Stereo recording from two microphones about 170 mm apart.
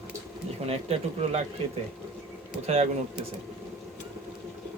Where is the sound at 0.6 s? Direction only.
35° right (ahead or behind).